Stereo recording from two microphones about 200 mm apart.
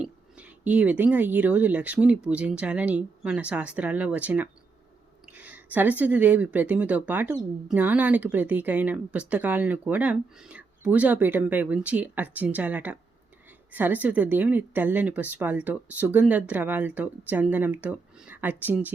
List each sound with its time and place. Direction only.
0.0 s speech: 5° right (ahead or behind)